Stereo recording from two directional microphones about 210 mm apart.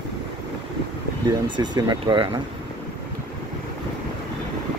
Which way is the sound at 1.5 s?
20° right (ahead or behind).